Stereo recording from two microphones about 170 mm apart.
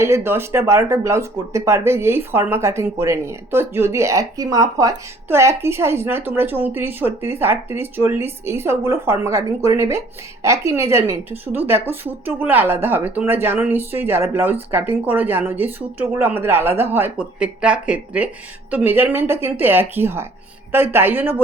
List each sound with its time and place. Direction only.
0.0 s speech: 15° right (ahead or behind)